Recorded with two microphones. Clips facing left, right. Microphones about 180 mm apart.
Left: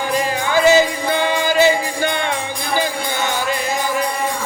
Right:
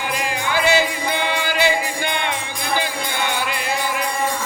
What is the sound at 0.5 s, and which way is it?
Music, 45° left (ahead or behind).